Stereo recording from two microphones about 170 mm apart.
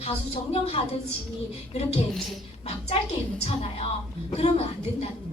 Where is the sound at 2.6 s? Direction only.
40° left (ahead or behind).